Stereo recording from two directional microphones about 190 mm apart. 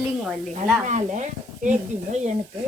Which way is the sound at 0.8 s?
40° right (ahead or behind).